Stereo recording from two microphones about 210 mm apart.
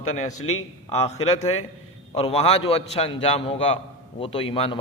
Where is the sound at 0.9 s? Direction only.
30° left (ahead or behind).